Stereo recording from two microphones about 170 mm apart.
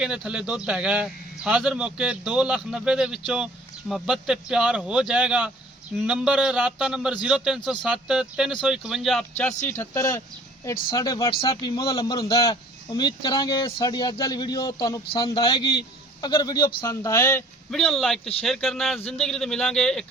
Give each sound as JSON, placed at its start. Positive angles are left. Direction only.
{"t": 0.0, "sound": "a man's voice", "side_deg": -5}
{"t": 9.6, "sound": "a man's voice", "side_deg": 15}